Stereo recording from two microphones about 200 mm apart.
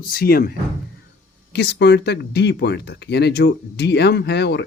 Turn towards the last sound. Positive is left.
turn(degrees=55)  # may be behind; listen again after turning